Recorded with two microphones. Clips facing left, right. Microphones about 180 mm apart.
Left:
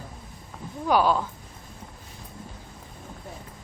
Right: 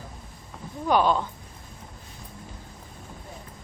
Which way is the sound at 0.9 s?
5° left (ahead or behind).